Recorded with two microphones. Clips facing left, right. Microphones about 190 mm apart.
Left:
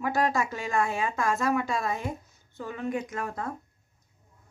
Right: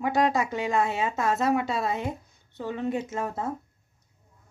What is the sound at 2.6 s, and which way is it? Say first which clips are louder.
Speech: right 3 dB; 25° right (ahead or behind).